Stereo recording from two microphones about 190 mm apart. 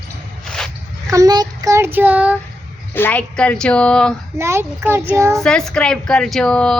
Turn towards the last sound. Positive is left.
turn(degrees=5)  # may be behind; listen again after turning